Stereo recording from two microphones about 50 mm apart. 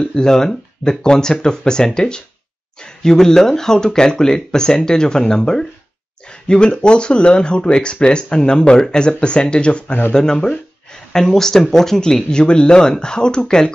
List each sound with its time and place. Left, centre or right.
0.0 s speech: centre